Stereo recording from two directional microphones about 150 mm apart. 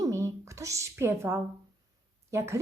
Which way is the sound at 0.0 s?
20° right (ahead or behind).